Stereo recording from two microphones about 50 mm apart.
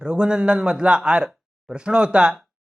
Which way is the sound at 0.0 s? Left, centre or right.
Centre.